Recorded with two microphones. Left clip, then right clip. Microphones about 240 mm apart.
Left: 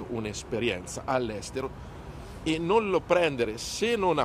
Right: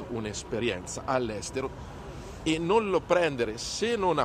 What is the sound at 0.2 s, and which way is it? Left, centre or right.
A man's voice, centre.